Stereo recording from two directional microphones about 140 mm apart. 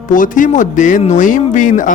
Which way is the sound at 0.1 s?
70° left (ahead or behind).